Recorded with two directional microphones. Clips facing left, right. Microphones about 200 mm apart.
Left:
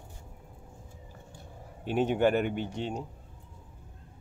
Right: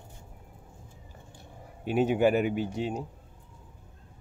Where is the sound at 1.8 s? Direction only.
10° right (ahead or behind).